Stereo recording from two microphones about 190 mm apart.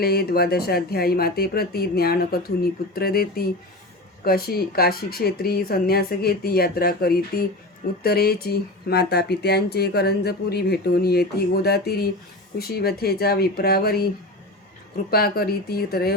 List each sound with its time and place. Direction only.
0.0 s speech: 55° left (ahead or behind)
15.1 s speech: 55° left (ahead or behind)